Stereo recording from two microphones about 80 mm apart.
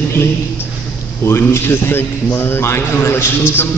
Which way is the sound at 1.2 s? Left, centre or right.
Left.